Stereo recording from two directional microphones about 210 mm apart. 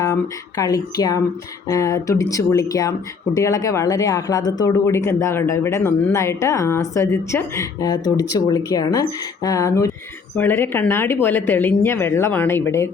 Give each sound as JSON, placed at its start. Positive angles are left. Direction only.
{"t": 0.0, "sound": "speech", "side_deg": 15}